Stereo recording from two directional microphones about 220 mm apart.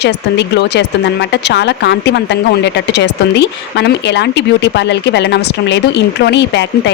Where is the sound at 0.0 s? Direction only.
50° left (ahead or behind).